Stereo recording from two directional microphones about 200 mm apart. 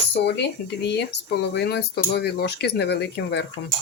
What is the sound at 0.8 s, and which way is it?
Speech, 55° left (ahead or behind).